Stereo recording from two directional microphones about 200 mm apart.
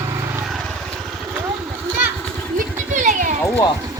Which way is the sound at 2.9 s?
40° right (ahead or behind).